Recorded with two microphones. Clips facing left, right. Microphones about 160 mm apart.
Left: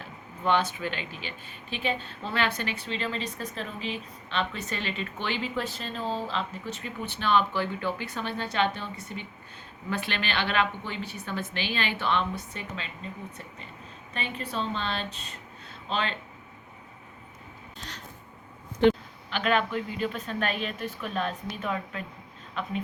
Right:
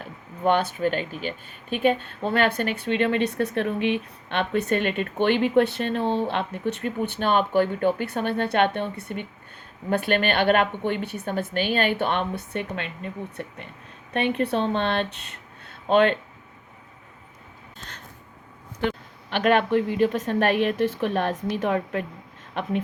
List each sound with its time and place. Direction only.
0.4 s a woman's voice: 50° right (ahead or behind)
17.7 s a sound: 50° right (ahead or behind)
19.3 s speech: 55° right (ahead or behind)